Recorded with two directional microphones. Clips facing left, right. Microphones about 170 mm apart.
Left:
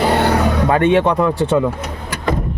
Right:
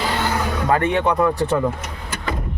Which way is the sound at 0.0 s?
65° left (ahead or behind).